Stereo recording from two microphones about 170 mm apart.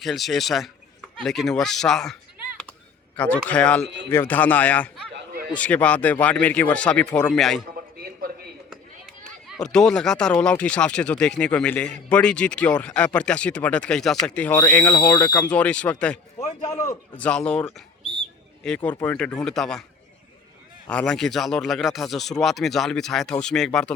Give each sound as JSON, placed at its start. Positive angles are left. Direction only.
{"t": 0.0, "sound": "speech", "side_deg": 0}
{"t": 3.2, "sound": "speech", "side_deg": 10}
{"t": 5.1, "sound": "a sound", "side_deg": -60}
{"t": 5.5, "sound": "speech", "side_deg": 5}
{"t": 8.7, "sound": "a sound", "side_deg": 0}
{"t": 9.6, "sound": "speech", "side_deg": 5}
{"t": 15.5, "sound": "speech", "side_deg": 5}
{"t": 16.4, "sound": "a man's voice", "side_deg": 20}
{"t": 17.2, "sound": "a sound", "side_deg": 5}
{"t": 19.0, "sound": "speech", "side_deg": 5}
{"t": 20.8, "sound": "speech", "side_deg": 5}